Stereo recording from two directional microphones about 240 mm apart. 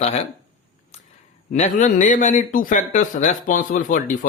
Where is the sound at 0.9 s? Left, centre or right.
Left.